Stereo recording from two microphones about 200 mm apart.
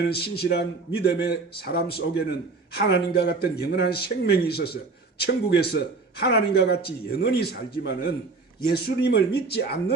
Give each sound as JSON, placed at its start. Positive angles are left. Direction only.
{"t": 0.1, "sound": "speech", "side_deg": 55}